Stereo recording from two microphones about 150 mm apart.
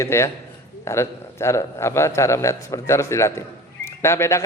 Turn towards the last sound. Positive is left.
turn(degrees=20)  # may be behind; listen again after turning